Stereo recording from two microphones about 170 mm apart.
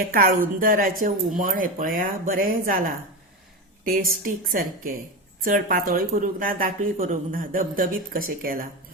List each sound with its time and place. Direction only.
0.0 s speech: 55° right (ahead or behind)